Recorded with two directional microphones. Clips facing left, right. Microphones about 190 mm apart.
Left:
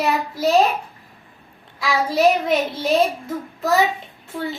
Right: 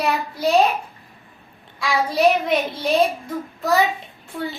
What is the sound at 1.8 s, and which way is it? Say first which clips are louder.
A woman's voice: left 1 dB; centre (ahead or behind).